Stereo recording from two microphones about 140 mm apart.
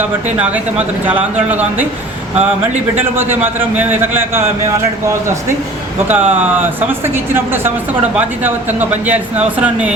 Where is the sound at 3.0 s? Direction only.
15° right (ahead or behind).